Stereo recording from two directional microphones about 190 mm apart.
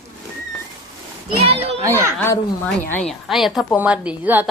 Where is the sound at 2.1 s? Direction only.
15° left (ahead or behind).